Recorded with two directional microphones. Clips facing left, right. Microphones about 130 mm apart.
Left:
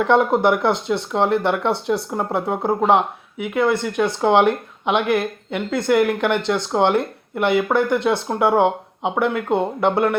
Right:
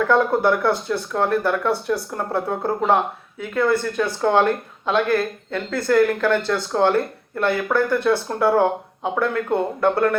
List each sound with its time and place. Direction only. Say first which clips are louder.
0.0 s speech: left 2 dB; 20° left (ahead or behind)